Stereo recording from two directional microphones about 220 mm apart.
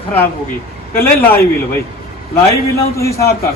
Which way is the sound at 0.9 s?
10° left (ahead or behind).